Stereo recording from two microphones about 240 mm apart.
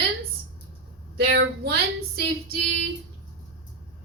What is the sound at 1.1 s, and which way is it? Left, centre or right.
Speech, right.